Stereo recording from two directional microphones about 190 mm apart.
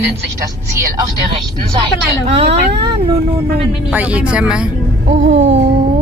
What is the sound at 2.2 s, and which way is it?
Speech, 35° right (ahead or behind).